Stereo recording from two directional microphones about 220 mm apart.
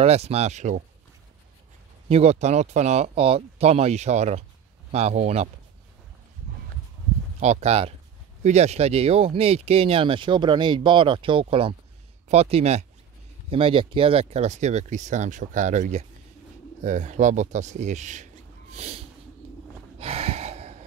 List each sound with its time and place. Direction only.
0.0 s speech: 30° right (ahead or behind)
2.0 s speech: 30° right (ahead or behind)
7.3 s speech: 30° right (ahead or behind)
20.0 s a sound: 30° right (ahead or behind)